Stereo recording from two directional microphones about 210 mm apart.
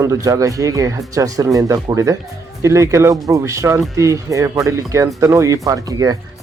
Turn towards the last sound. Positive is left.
turn(degrees=-15)  # may be behind; listen again after turning